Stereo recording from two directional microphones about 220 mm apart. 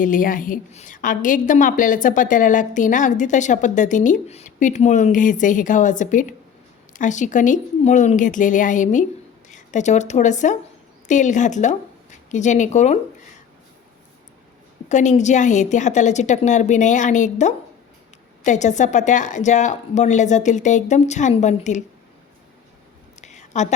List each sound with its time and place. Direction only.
0.0 s a woman's voice: 35° left (ahead or behind)
14.8 s a woman's voice: 30° left (ahead or behind)
23.2 s a sound: 30° left (ahead or behind)